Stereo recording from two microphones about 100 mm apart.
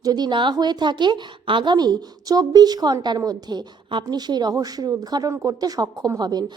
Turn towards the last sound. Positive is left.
turn(degrees=-40)  # may be behind; listen again after turning